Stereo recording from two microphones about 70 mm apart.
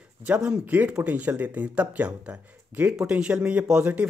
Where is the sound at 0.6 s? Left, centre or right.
Right.